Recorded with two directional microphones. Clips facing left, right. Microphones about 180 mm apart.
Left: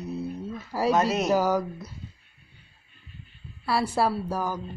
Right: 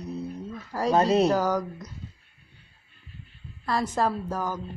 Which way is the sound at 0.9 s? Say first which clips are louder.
Right 4 dB; 30° right (ahead or behind).